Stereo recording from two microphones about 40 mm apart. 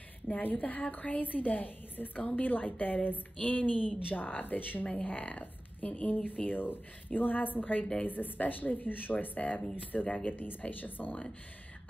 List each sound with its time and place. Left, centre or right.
0.6 s a woman's voice: left
5.0 s a woman's voice: left
10.3 s a woman's voice: left